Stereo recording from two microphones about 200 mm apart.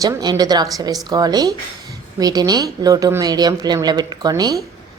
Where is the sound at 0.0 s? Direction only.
20° right (ahead or behind).